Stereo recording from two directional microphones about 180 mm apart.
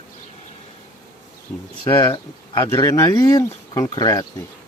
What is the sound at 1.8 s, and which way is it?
Speech, 25° left (ahead or behind).